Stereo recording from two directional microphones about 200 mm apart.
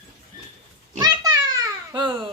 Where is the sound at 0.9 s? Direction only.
20° right (ahead or behind).